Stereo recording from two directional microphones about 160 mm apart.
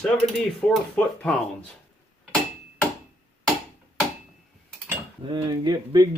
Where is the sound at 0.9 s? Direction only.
10° left (ahead or behind).